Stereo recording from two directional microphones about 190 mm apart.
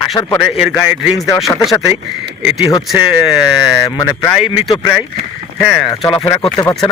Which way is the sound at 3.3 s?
Centre (ahead or behind).